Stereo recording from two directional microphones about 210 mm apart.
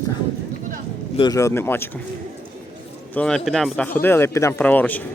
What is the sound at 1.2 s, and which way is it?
Speech, 15° left (ahead or behind).